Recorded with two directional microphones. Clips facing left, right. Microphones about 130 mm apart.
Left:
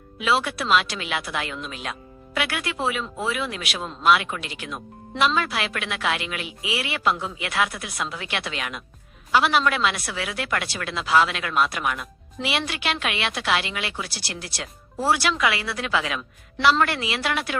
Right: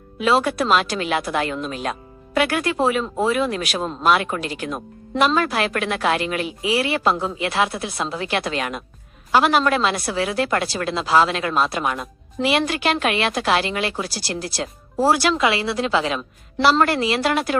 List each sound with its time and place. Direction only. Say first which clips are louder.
0.2 s speech: right 5 dB; 40° right (ahead or behind)